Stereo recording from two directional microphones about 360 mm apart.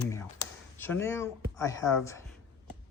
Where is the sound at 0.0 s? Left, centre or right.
Centre.